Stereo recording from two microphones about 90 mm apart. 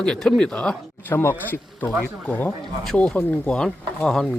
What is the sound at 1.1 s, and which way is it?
A man's voice, 25° left (ahead or behind).